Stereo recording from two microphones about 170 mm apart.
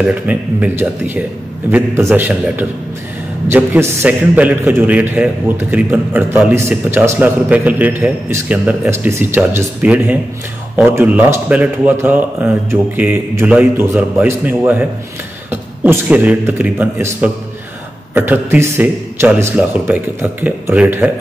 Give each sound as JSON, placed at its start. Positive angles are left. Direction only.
{"t": 0.0, "sound": "a man's voice", "side_deg": -10}